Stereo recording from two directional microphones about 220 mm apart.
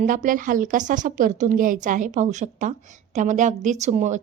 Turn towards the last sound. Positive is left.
turn(degrees=-30)  # may be behind; listen again after turning